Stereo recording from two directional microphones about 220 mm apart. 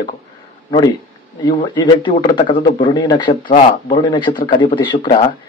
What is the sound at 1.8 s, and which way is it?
Speech, 20° left (ahead or behind).